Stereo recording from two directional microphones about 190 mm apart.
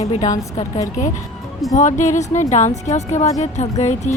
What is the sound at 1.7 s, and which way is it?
Speech, 40° left (ahead or behind).